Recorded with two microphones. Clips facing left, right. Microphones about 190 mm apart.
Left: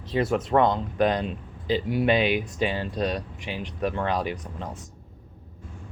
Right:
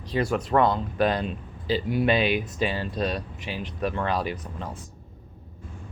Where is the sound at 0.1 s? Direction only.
25° left (ahead or behind).